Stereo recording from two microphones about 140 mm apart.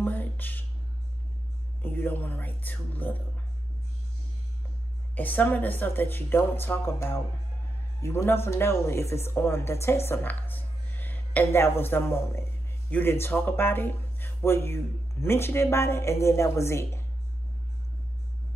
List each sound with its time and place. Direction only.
0.0 s music: 10° left (ahead or behind)
1.8 s speech: 15° left (ahead or behind)
5.1 s speech: 10° left (ahead or behind)